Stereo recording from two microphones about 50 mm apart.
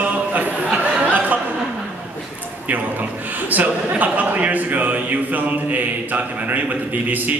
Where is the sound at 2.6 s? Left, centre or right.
Right.